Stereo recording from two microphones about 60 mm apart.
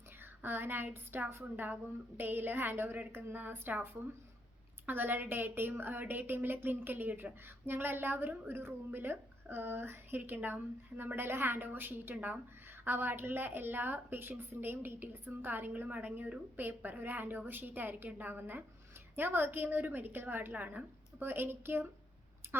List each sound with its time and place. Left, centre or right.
0.4 s a woman's voice: right